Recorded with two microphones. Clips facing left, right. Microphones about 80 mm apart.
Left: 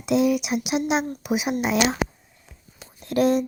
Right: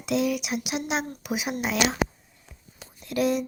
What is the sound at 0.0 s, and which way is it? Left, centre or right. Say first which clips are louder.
Speech: left 5 dB; centre.